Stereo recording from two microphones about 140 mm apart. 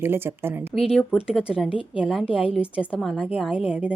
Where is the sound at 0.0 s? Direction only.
15° right (ahead or behind).